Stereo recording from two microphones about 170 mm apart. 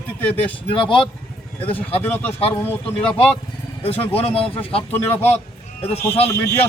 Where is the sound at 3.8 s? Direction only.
35° left (ahead or behind).